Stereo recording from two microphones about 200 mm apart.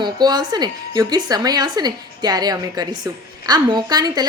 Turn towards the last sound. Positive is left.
turn(degrees=-20)  # may be behind; listen again after turning